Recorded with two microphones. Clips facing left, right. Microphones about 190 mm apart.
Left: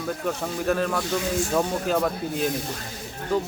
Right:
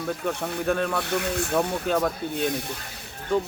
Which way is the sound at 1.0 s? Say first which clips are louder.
Left 1 dB; 60° right (ahead or behind).